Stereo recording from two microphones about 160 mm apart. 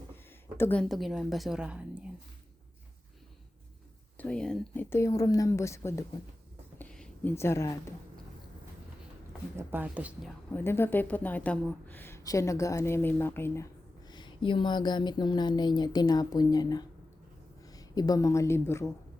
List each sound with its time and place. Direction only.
0.5 s speech: 10° left (ahead or behind); by 2.0 s 5° right (ahead or behind)
4.2 s a woman's voice: 5° left (ahead or behind)
6.7 s a sound: 10° left (ahead or behind)
7.3 s a woman's voice: 15° left (ahead or behind)
9.6 s speech: 10° right (ahead or behind)
10.5 s a woman's voice: 15° left (ahead or behind)
14.1 s speech: 30° left (ahead or behind)